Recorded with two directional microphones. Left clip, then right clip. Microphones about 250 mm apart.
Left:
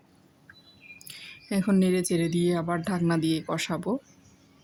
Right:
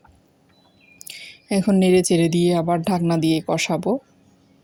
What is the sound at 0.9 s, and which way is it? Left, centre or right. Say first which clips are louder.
A woman's voice: right 7 dB; centre.